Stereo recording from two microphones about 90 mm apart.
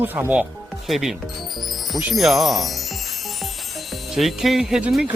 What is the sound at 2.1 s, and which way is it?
Chime, centre (ahead or behind).